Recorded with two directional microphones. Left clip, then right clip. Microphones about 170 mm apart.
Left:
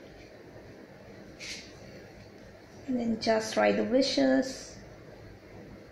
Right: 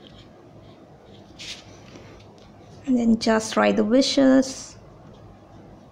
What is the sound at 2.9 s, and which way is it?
A woman's voice, 25° right (ahead or behind).